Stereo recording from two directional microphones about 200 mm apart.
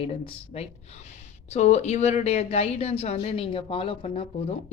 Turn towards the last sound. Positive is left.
turn(degrees=30)  # may be behind; listen again after turning